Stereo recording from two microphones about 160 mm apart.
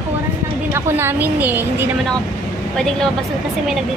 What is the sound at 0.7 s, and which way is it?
A woman's voice, 15° right (ahead or behind).